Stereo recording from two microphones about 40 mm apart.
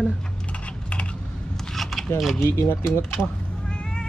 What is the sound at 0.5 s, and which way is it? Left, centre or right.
Typing, left.